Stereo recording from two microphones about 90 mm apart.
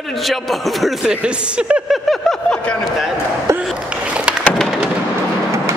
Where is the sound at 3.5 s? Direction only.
35° right (ahead or behind).